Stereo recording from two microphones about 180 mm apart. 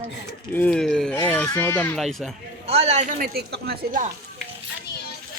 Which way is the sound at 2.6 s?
35° right (ahead or behind).